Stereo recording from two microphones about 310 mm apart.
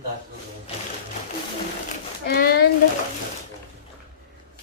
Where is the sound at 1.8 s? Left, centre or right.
Left.